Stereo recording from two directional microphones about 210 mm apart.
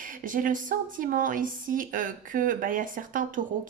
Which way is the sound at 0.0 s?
40° right (ahead or behind).